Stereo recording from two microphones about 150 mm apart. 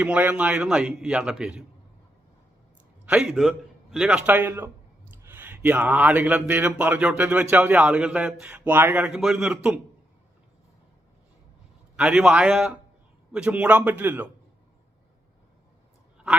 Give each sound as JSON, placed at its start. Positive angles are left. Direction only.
{"t": 0.0, "sound": "a man's voice", "side_deg": -10}
{"t": 3.1, "sound": "a man's voice", "side_deg": -5}
{"t": 11.9, "sound": "a man's voice", "side_deg": -5}